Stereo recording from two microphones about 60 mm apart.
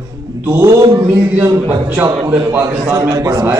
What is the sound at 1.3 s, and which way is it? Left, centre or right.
A man's voice, right.